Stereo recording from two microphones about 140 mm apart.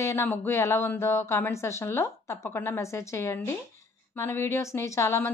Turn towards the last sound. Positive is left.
turn(degrees=20)  # may be behind; listen again after turning